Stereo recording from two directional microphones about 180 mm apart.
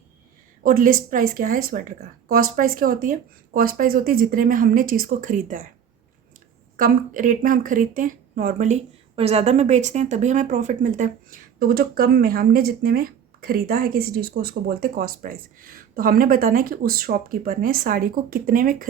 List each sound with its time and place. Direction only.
0.6 s speech: 50° right (ahead or behind)
6.7 s speech: 50° right (ahead or behind)